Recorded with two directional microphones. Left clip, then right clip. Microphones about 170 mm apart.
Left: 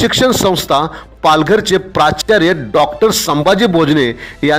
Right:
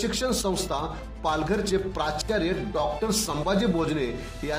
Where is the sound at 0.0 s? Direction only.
55° left (ahead or behind).